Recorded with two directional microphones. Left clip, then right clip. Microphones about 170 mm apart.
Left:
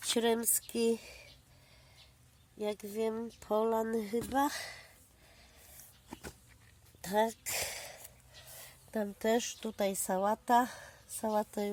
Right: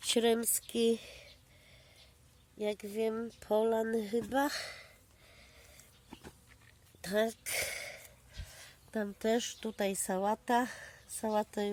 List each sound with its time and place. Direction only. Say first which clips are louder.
0.1 s speech: right 1 dB; 10° right (ahead or behind)
2.6 s speech: right 1 dB; 5° right (ahead or behind)
7.0 s a sound: left 1 dB; 15° right (ahead or behind)
8.9 s a woman's voice: left 1 dB; centre (ahead or behind)